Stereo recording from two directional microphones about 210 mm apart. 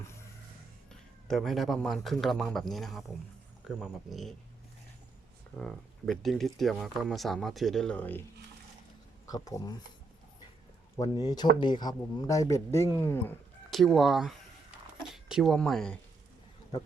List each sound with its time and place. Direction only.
0.9 s speech: centre (ahead or behind)
5.5 s speech: centre (ahead or behind)
9.3 s speech: 15° left (ahead or behind)
10.9 s speech: 15° left (ahead or behind)
13.7 s speech: centre (ahead or behind)